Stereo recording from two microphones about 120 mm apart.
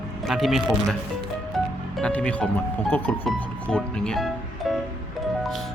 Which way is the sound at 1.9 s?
10° left (ahead or behind).